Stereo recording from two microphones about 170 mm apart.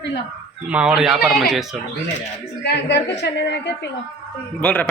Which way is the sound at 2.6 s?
85° left.